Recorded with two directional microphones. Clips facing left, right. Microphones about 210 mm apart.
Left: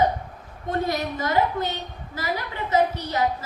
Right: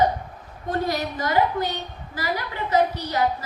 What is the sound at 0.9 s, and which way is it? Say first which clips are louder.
A woman's voice: even; 25° left (ahead or behind).